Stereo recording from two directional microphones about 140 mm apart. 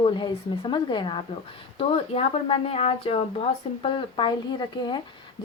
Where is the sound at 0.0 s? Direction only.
35° left (ahead or behind).